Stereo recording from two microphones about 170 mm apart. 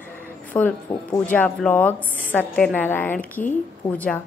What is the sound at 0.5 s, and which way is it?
A woman's voice, 10° left (ahead or behind).